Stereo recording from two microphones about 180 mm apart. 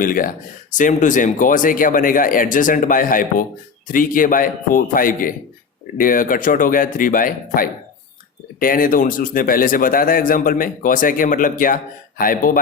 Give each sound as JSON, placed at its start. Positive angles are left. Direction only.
{"t": 0.0, "sound": "speech", "side_deg": 50}